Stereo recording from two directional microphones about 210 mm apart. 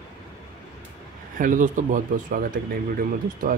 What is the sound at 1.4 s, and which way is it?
Speech, 40° right (ahead or behind).